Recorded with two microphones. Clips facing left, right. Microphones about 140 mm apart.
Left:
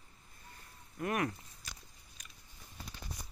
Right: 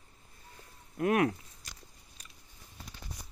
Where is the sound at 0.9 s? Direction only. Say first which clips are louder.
Right 7 dB; 70° right (ahead or behind).